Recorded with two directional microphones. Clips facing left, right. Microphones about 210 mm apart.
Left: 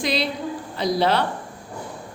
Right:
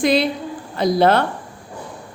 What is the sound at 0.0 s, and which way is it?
A woman's voice, 50° right (ahead or behind).